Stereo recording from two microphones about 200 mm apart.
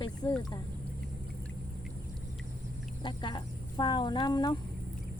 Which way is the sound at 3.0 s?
20° left (ahead or behind).